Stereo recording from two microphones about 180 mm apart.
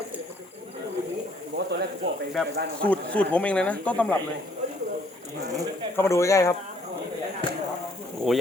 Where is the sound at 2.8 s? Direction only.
5° left (ahead or behind).